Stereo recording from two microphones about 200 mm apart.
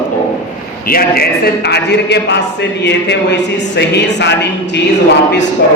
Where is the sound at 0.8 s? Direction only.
50° left (ahead or behind).